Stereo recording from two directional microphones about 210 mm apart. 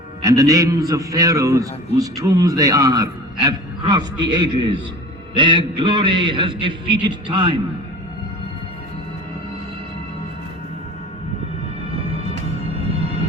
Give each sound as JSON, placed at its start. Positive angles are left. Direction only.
{"t": 0.2, "sound": "a man's voice", "side_deg": -15}